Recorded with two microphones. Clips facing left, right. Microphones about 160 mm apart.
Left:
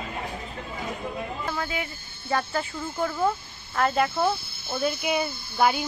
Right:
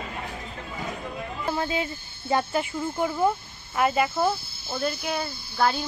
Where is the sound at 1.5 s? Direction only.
25° right (ahead or behind).